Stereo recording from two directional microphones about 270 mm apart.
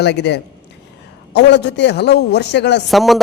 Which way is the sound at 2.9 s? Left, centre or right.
Centre.